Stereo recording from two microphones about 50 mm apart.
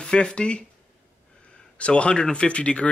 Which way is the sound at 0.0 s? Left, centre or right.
Centre.